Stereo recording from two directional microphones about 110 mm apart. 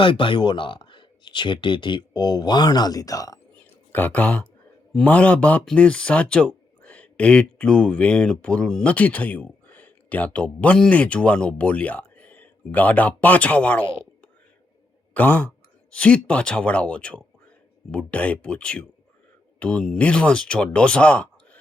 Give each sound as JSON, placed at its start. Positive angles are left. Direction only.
{"t": 0.0, "sound": "speech", "side_deg": 50}
{"t": 3.9, "sound": "speech", "side_deg": 15}
{"t": 15.1, "sound": "speech", "side_deg": 15}